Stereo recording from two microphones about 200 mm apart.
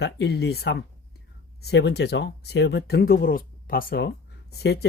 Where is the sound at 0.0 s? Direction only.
55° left (ahead or behind).